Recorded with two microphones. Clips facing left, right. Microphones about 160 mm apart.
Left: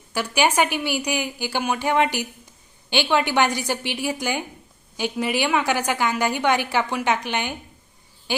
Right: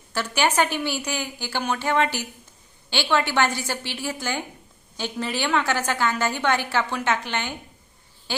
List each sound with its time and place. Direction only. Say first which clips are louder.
0.1 s a woman's voice: left 2 dB; 10° left (ahead or behind)